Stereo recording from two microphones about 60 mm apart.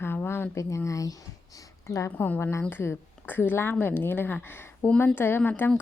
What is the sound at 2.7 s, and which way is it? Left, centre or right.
Speech, left.